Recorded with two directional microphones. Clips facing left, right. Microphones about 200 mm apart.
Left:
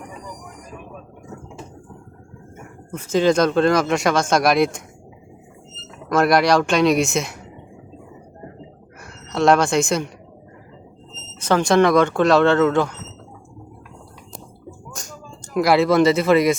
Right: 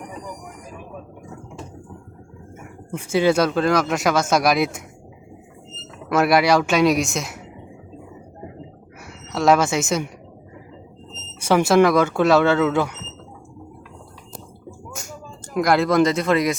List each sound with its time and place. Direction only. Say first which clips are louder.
2.9 s speech: left 1 dB; 10° right (ahead or behind)
6.1 s speech: left 1 dB; 5° right (ahead or behind)
9.3 s speech: left 1 dB; 5° right (ahead or behind)
11.3 s speech: right 1 dB; 10° right (ahead or behind)
14.8 s a sound: right 3 dB; 10° right (ahead or behind)
15.5 s speech: left 2 dB; centre (ahead or behind)